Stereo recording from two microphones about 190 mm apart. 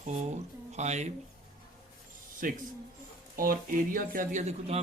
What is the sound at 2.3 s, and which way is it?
Speech, 45° right (ahead or behind).